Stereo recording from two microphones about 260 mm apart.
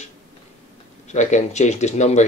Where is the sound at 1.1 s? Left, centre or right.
Left.